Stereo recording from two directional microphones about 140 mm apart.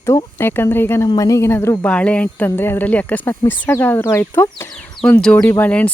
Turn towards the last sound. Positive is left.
turn(degrees=10)  # may be behind; listen again after turning